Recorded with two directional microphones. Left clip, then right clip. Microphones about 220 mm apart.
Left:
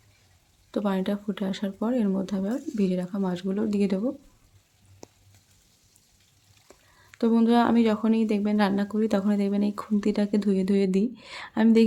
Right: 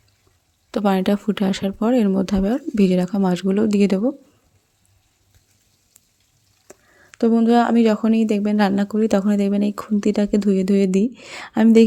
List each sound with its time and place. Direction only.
0.7 s speech: 40° right (ahead or behind)
6.7 s speech: 25° right (ahead or behind)